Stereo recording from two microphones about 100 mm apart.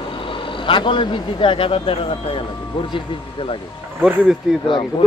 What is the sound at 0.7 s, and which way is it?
Speech, 55° left (ahead or behind).